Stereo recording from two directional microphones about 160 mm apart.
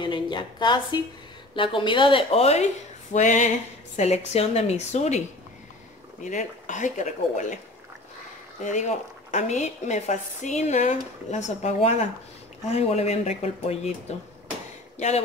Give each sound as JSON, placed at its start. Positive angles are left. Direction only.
{"t": 0.0, "sound": "a sound", "side_deg": 30}
{"t": 1.5, "sound": "a woman's voice", "side_deg": 30}
{"t": 6.2, "sound": "a woman's voice", "side_deg": 50}
{"t": 8.6, "sound": "a woman's voice", "side_deg": 50}
{"t": 15.0, "sound": "a woman's voice", "side_deg": 45}